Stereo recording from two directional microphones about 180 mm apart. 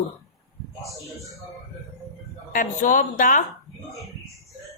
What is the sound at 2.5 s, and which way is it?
Speech, 45° left (ahead or behind).